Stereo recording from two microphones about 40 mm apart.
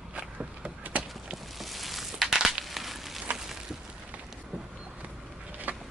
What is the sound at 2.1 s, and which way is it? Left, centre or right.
Crushing, centre.